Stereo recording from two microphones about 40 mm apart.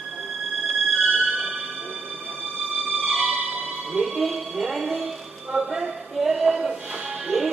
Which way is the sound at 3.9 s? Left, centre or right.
Centre.